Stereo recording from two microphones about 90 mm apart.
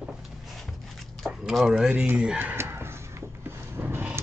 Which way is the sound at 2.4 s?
25° right (ahead or behind).